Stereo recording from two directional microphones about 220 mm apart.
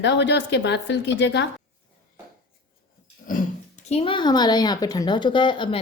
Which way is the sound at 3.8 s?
25° left (ahead or behind).